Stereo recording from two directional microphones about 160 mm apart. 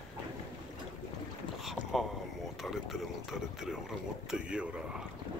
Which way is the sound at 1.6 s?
Centre (ahead or behind).